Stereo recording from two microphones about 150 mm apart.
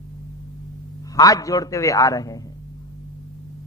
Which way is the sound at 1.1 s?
25° left (ahead or behind).